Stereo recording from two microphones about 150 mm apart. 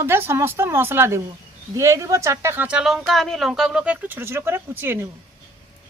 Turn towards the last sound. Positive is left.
turn(degrees=-15)  # may be behind; listen again after turning